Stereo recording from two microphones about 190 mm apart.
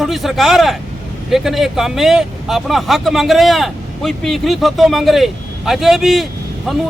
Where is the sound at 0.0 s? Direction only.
Centre (ahead or behind).